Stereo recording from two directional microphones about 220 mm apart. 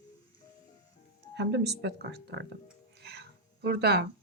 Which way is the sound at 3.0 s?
45° right (ahead or behind).